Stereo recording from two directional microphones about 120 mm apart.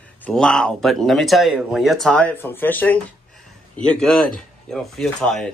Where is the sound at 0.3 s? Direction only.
5° left (ahead or behind).